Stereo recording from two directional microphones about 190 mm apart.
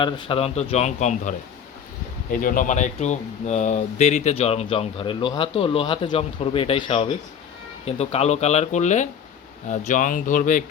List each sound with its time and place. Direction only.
0.0 s speech: 25° left (ahead or behind); by 10.6 s 40° left (ahead or behind)